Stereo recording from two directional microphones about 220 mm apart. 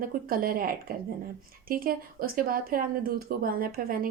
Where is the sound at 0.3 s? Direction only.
40° right (ahead or behind).